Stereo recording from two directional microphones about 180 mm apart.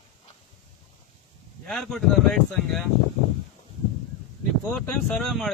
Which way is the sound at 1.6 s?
Centre (ahead or behind).